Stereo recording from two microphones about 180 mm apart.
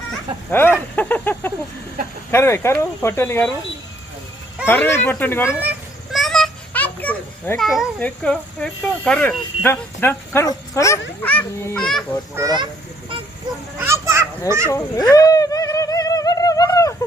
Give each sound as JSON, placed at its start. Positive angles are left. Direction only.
{"t": 0.5, "sound": "speech", "side_deg": 10}
{"t": 4.6, "sound": "speech", "side_deg": 10}
{"t": 5.5, "sound": "children playing", "side_deg": -5}
{"t": 7.7, "sound": "speech", "side_deg": 0}
{"t": 12.4, "sound": "speech", "side_deg": -20}
{"t": 13.7, "sound": "children playing", "side_deg": -15}
{"t": 14.7, "sound": "a sound", "side_deg": 20}